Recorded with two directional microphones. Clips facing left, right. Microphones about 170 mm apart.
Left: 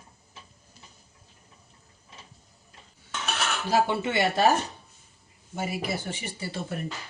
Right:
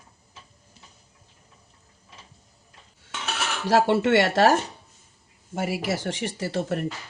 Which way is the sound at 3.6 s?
85° right.